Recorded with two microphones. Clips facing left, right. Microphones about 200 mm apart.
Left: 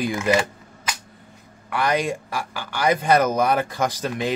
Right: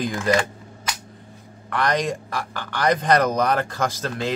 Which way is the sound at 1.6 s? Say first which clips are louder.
Even; 10° left (ahead or behind).